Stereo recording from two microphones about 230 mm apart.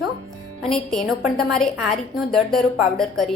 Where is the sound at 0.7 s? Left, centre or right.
Centre.